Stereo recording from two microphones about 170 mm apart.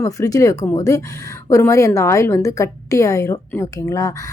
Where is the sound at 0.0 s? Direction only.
20° left (ahead or behind).